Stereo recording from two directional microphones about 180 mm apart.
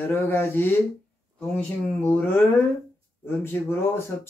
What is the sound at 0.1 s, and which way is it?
Speech, 15° left (ahead or behind).